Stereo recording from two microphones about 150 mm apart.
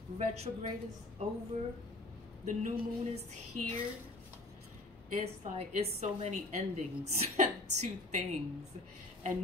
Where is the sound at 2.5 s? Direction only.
60° right (ahead or behind).